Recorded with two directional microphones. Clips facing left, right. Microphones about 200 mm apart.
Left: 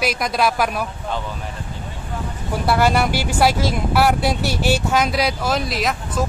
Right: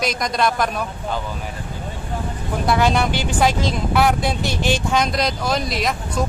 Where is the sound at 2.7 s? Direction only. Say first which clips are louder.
Left 1 dB; 5° left (ahead or behind).